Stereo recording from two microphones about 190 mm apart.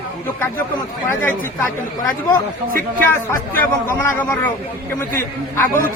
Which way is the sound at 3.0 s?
10° left (ahead or behind).